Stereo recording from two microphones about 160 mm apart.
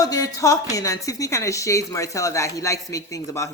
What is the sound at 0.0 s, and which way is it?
A woman's voice, 20° left (ahead or behind).